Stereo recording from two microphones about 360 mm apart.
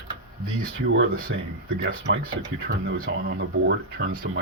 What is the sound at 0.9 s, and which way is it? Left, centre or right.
Speech, right.